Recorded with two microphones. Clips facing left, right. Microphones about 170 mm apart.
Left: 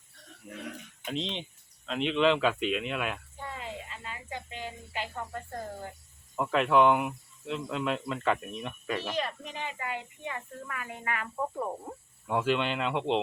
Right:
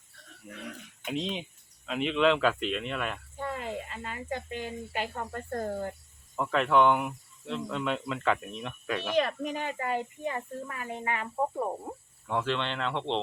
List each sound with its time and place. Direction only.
0.4 s speech: centre (ahead or behind)
3.4 s a sound: 50° right (ahead or behind)
6.3 s speech: 5° left (ahead or behind)
9.1 s speech: 55° right (ahead or behind); by 11.9 s 20° right (ahead or behind)
12.3 s speech: 10° left (ahead or behind)